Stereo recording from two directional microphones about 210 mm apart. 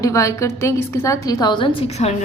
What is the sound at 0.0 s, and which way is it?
A woman's voice, 15° left (ahead or behind).